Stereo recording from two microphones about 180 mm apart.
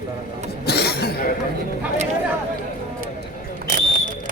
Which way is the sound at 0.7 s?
60° left (ahead or behind).